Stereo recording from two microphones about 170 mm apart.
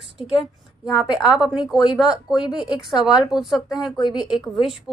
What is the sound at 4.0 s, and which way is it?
Speech, 25° left (ahead or behind).